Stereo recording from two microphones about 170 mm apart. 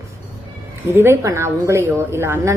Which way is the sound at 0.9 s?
15° right (ahead or behind).